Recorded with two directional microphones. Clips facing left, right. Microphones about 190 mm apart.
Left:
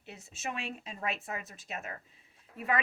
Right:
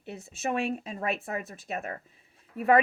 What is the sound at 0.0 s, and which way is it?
Speech, 55° right (ahead or behind).